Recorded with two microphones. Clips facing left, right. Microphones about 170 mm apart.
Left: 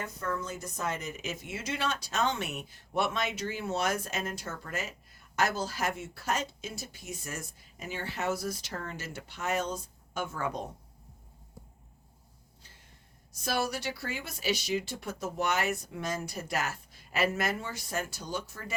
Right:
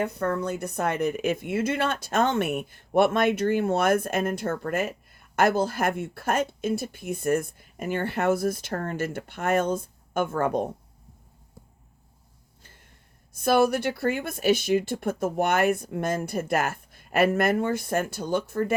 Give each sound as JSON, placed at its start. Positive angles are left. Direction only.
{"t": 0.0, "sound": "speech", "side_deg": -60}
{"t": 13.3, "sound": "speech", "side_deg": -55}